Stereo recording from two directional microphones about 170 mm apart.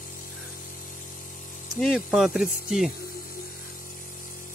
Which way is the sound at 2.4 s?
55° left (ahead or behind).